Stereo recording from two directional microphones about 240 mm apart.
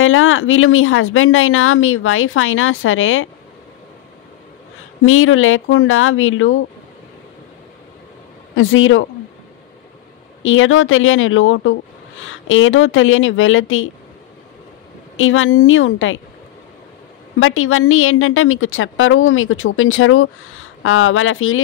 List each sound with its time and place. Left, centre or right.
0.0 s a woman's voice: left
5.0 s a woman's voice: left
8.5 s speech: left
10.4 s a woman's voice: left
15.1 s a woman's voice: left
17.4 s a woman's voice: left